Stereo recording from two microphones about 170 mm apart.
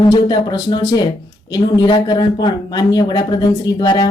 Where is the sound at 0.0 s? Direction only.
25° left (ahead or behind).